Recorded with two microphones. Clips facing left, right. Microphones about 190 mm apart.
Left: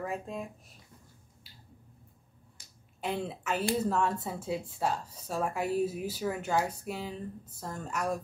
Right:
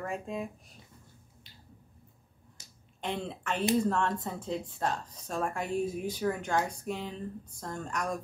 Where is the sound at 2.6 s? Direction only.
20° right (ahead or behind).